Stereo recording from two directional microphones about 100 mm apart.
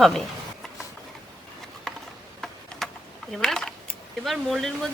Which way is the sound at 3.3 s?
5° left (ahead or behind).